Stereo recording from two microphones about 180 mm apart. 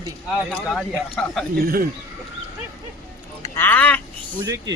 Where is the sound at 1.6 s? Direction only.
55° right (ahead or behind).